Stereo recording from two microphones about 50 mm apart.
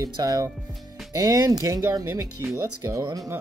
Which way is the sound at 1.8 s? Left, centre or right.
Right.